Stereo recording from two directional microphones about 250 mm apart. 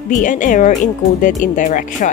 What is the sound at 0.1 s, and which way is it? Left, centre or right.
A woman's voice, left.